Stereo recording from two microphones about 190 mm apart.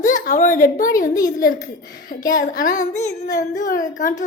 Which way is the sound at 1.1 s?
20° left (ahead or behind).